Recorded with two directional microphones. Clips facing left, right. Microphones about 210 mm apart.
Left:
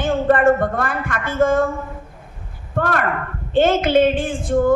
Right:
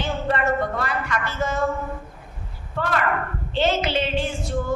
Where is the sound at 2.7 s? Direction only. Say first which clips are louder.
Left 5 dB; 50° left (ahead or behind).